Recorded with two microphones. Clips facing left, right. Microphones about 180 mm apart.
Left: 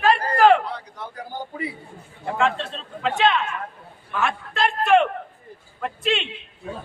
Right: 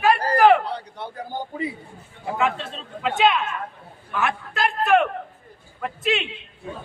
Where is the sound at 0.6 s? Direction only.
30° right (ahead or behind).